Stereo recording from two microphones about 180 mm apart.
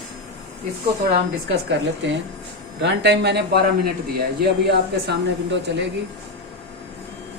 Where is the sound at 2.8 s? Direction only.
70° right (ahead or behind).